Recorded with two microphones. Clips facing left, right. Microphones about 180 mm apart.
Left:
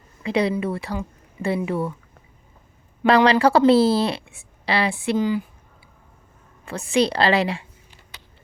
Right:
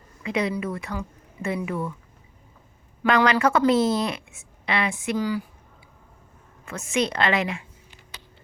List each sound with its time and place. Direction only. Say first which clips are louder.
0.2 s a woman's voice: left 4 dB; 30° left (ahead or behind)
3.1 s a woman's voice: left 4 dB; 35° left (ahead or behind)
6.7 s a woman's voice: left 5 dB; 35° left (ahead or behind)